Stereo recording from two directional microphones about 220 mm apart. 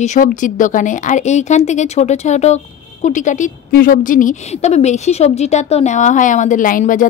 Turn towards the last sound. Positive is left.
turn(degrees=35)  # may be behind; listen again after turning